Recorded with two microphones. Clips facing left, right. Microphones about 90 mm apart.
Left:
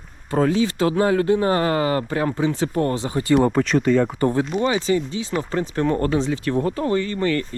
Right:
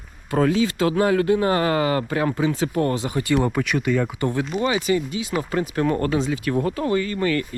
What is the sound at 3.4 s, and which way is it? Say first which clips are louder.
Speech: left 4 dB; 50° left (ahead or behind).